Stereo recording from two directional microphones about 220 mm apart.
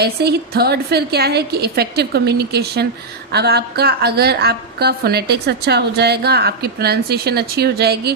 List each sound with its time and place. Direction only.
0.0 s a woman's voice: 45° right (ahead or behind)